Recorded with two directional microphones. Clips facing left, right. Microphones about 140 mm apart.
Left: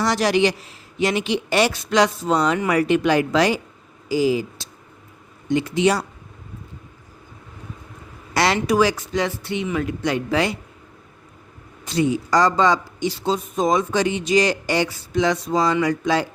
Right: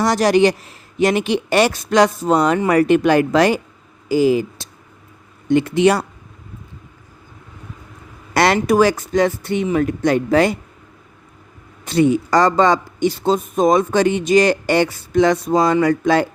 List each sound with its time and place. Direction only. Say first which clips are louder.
0.0 s a man's voice: right 5 dB; 45° right (ahead or behind)
8.3 s a man's voice: right 4 dB; 55° right (ahead or behind)
11.9 s a man's voice: right 5 dB; 60° right (ahead or behind)